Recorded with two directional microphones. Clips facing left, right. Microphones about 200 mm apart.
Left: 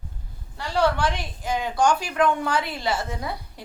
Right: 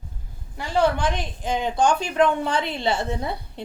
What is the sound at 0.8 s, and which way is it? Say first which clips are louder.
A woman's voice: right 1 dB; 20° right (ahead or behind).